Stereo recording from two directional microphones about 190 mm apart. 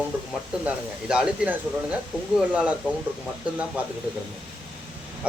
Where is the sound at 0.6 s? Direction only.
5° right (ahead or behind).